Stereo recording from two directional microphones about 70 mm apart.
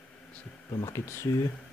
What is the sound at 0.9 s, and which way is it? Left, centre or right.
Speech, left.